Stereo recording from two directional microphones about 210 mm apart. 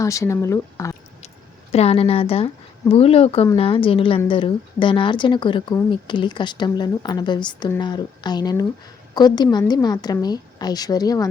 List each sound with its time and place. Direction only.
0.0 s speech: 15° left (ahead or behind)
1.7 s speech: 30° left (ahead or behind)